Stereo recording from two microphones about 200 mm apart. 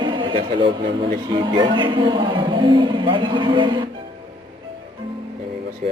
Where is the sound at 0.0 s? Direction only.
25° right (ahead or behind).